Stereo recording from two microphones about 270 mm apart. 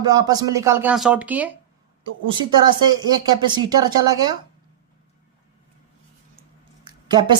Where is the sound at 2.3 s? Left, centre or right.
Centre.